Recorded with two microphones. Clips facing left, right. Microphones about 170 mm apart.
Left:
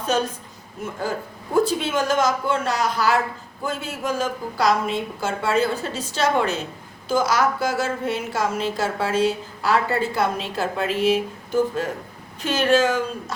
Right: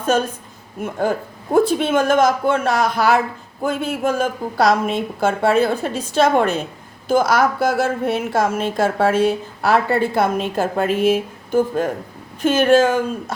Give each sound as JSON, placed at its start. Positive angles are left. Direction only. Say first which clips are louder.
{"t": 1.5, "sound": "a woman's voice", "louder": "right 5 dB", "side_deg": -55}